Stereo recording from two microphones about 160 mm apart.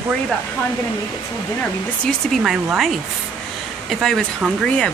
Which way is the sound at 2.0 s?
Centre (ahead or behind).